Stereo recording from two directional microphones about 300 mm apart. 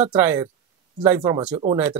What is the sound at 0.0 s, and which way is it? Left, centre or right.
Speech, centre.